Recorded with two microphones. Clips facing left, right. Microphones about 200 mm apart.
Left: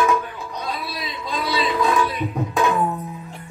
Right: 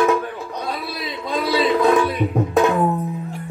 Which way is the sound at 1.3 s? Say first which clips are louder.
Right 5 dB; 55° right (ahead or behind).